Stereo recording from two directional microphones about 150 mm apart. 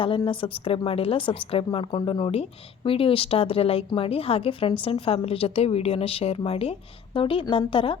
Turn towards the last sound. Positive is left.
turn(degrees=35)  # may be behind; listen again after turning